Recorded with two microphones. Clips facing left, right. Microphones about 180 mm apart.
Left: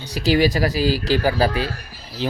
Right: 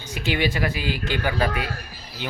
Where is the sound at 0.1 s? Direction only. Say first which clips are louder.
Left 7 dB; 40° left (ahead or behind).